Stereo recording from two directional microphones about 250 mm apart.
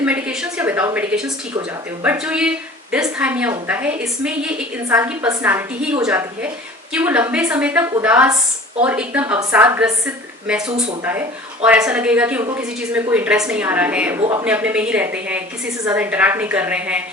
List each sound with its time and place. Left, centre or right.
0.0 s a sound: centre
2.0 s a woman's voice: centre
14.4 s a woman's voice: centre